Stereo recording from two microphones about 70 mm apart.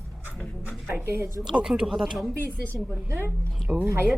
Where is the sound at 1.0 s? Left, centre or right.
Right.